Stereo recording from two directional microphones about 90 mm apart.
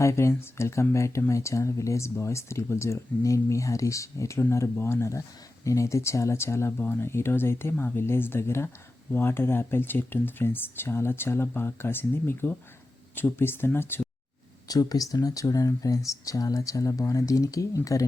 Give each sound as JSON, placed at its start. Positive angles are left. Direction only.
{"t": 0.0, "sound": "speech", "side_deg": 30}
{"t": 14.7, "sound": "speech", "side_deg": 45}